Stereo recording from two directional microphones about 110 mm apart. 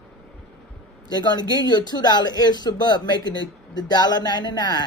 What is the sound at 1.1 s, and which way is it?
Speech, 40° left (ahead or behind).